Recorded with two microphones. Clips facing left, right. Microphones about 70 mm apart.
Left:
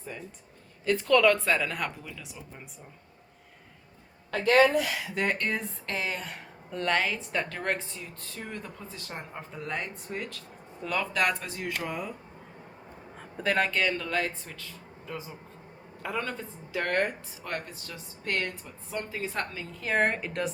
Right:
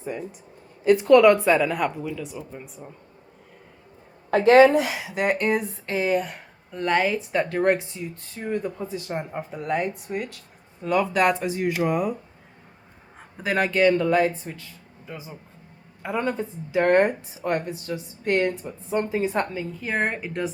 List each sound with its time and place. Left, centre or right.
0.9 s speech: centre
4.3 s speech: right; by 7.6 s centre
7.9 s speech: right
13.1 s speech: centre
14.0 s speech: centre
19.2 s speech: centre
19.8 s speech: centre